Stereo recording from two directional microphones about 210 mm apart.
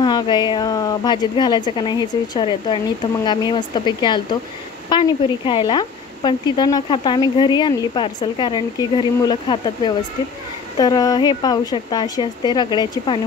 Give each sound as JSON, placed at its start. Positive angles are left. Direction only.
{"t": 0.0, "sound": "speech", "side_deg": 20}